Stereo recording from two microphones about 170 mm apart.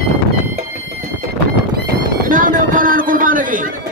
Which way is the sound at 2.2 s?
50° right (ahead or behind).